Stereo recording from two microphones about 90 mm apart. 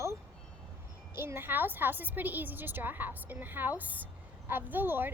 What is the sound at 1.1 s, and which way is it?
A woman's voice, 25° right (ahead or behind).